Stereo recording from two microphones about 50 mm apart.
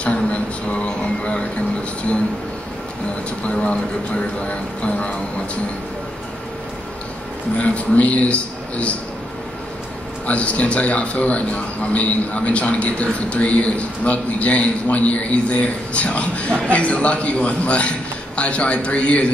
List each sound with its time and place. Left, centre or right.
0.0 s a sound: left
3.4 s a man's voice: left
7.5 s a man's voice: left
10.2 s a man's voice: left